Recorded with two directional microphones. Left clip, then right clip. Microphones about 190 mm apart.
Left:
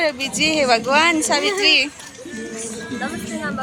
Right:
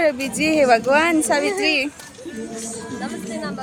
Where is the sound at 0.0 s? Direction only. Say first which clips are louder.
Even; 55° right (ahead or behind).